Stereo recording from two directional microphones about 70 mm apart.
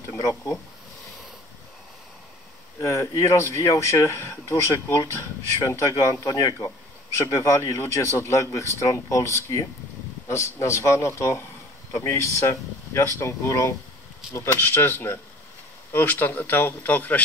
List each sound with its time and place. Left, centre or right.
0.2 s speech: left
2.8 s speech: left